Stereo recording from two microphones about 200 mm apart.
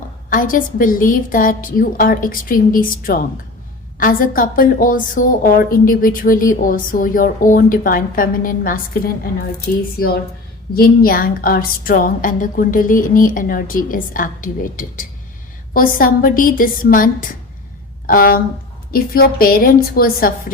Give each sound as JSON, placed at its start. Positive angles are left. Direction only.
{"t": 0.3, "sound": "a woman's voice", "side_deg": 40}
{"t": 10.8, "sound": "a woman's voice", "side_deg": 45}